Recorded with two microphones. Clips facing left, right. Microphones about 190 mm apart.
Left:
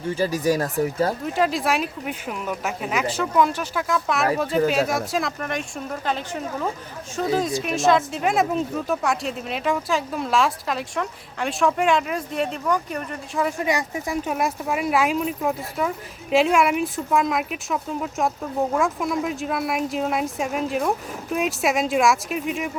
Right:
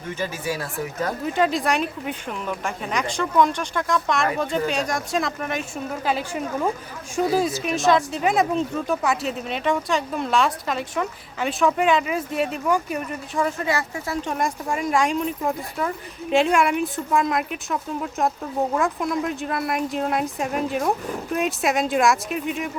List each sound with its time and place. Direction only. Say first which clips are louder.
0.2 s speech: left 7 dB; 40° left (ahead or behind)
1.2 s speech: right 1 dB; centre (ahead or behind)
13.7 s speech: left 1 dB; 15° left (ahead or behind)